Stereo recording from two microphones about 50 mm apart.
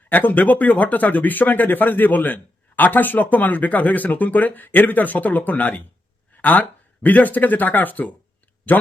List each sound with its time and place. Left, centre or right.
0.1 s speech: left